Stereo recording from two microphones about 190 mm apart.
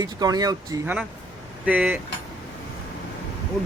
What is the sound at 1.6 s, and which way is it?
Speech, 5° right (ahead or behind).